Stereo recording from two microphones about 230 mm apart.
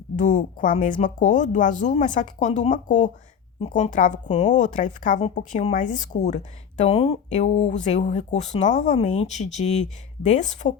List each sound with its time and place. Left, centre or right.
0.2 s speech: left